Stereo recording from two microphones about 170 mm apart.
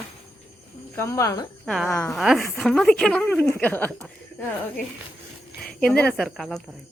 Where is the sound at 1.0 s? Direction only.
15° left (ahead or behind).